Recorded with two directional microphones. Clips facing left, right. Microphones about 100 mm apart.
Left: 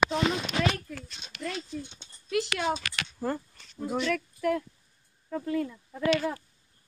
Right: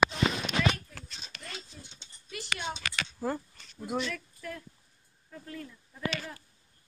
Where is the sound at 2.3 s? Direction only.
90° left.